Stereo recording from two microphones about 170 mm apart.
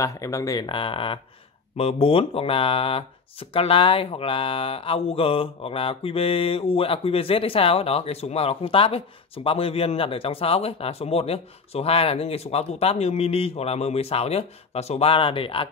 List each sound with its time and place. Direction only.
0.0 s speech: 20° left (ahead or behind)